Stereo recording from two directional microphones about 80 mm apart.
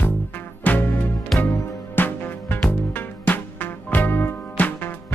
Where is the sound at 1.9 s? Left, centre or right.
Left.